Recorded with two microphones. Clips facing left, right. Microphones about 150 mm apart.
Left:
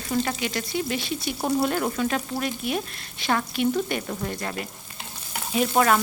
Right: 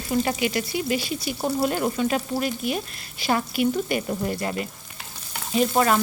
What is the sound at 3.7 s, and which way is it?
Frying, 15° right (ahead or behind).